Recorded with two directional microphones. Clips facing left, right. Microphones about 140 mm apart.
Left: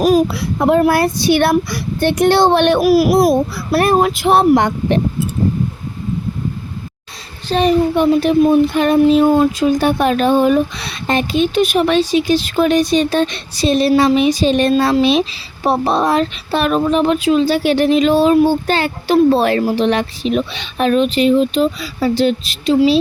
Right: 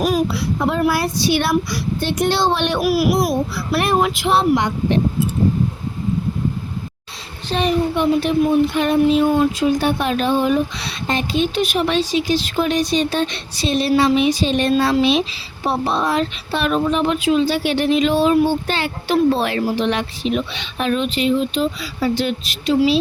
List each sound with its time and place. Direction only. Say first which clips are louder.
0.3 s speech: left 6 dB; 50° left (ahead or behind)
7.5 s speech: left 5 dB; 40° left (ahead or behind)